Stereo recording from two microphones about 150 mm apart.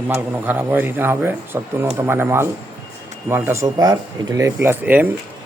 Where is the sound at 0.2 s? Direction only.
10° right (ahead or behind).